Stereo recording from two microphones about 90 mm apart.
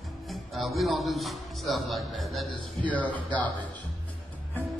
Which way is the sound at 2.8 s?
15° left (ahead or behind).